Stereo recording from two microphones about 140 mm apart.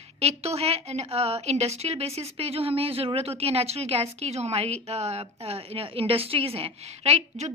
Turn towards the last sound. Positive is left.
turn(degrees=-50)  # may be behind; listen again after turning